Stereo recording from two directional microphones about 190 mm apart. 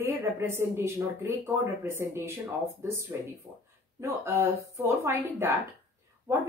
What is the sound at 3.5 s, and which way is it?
A woman's voice, 20° right (ahead or behind).